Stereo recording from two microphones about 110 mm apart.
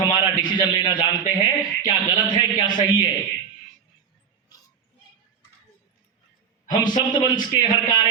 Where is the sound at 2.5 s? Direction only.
40° left (ahead or behind).